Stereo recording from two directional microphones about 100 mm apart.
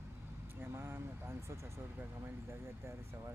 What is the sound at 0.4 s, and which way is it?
Speech, 25° right (ahead or behind).